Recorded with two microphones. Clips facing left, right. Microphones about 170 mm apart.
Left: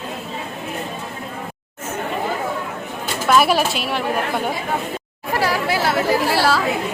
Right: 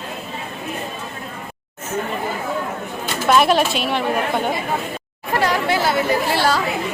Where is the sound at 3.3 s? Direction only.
5° left (ahead or behind).